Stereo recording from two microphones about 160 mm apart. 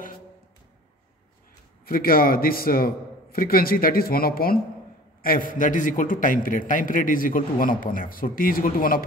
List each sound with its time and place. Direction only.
1.9 s a man's voice: 65° left (ahead or behind)